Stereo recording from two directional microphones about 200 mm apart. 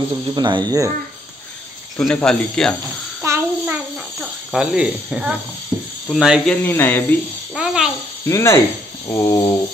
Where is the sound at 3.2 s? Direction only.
10° right (ahead or behind).